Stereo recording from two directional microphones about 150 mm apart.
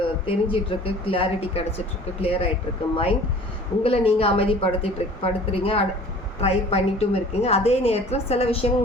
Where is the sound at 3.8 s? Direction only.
40° left (ahead or behind).